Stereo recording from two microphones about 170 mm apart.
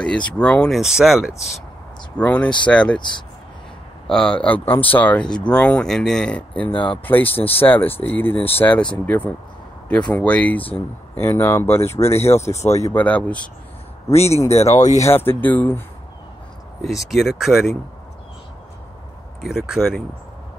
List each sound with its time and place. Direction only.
0.0 s speech: 5° left (ahead or behind)
2.1 s speech: 10° left (ahead or behind)
3.0 s speech: 25° left (ahead or behind)
4.1 s speech: 5° left (ahead or behind)
6.7 s speech: 30° left (ahead or behind)
7.1 s speech: 10° left (ahead or behind)
7.3 s speech: 35° left (ahead or behind)
7.6 s speech: 10° left (ahead or behind)
14.1 s speech: 40° left (ahead or behind)
15.0 s speech: 15° left (ahead or behind)
17.1 s speech: centre (ahead or behind)
19.4 s speech: 5° right (ahead or behind)